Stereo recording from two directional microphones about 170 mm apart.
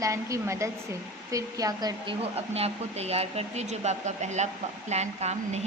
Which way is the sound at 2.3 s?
35° right (ahead or behind).